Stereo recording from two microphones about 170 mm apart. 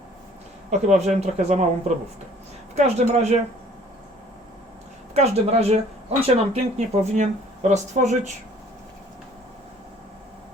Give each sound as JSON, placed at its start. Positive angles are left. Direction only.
{"t": 0.7, "sound": "speech", "side_deg": -40}
{"t": 2.7, "sound": "speech", "side_deg": -40}
{"t": 5.1, "sound": "speech", "side_deg": -40}